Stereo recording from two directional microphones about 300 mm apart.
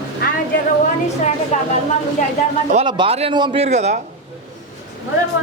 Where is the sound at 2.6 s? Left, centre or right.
Centre.